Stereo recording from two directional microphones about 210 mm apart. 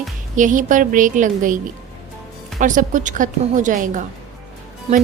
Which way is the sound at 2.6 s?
40° right (ahead or behind).